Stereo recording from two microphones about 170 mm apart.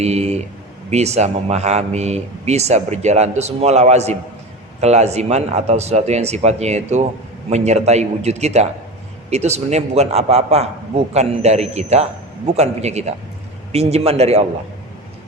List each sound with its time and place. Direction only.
0.0 s speech: 40° right (ahead or behind)